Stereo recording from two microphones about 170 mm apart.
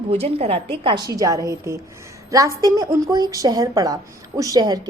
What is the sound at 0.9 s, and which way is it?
A woman's voice, 20° right (ahead or behind).